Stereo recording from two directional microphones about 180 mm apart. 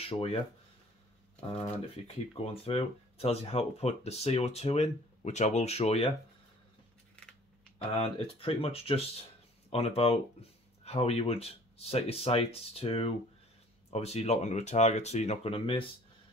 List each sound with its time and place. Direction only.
0.1 s speech: 35° left (ahead or behind)
2.3 s speech: 30° left (ahead or behind)
7.9 s speech: 30° left (ahead or behind)